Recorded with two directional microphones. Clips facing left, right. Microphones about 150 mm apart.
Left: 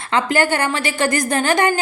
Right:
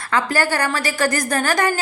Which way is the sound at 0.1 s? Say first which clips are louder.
Left 2 dB; 20° left (ahead or behind).